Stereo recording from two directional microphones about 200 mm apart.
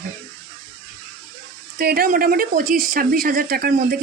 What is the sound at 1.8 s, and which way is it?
Speech, 50° right (ahead or behind).